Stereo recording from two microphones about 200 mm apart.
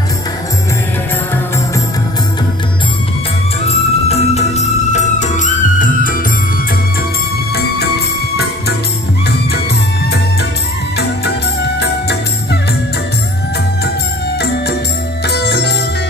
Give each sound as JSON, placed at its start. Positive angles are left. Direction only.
{"t": 3.6, "sound": "music", "side_deg": 30}
{"t": 11.0, "sound": "music", "side_deg": 55}
{"t": 15.2, "sound": "music", "side_deg": 55}